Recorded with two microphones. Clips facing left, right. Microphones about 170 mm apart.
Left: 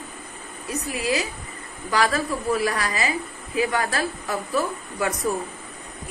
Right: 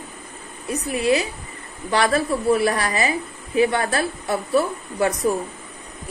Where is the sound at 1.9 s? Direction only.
35° right (ahead or behind).